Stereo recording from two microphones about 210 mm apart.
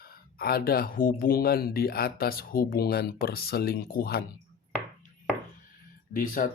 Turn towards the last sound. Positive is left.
turn(degrees=40)  # may be behind; listen again after turning